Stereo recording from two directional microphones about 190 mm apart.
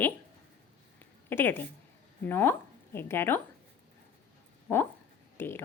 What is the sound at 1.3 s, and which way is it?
A woman's voice, 10° left (ahead or behind).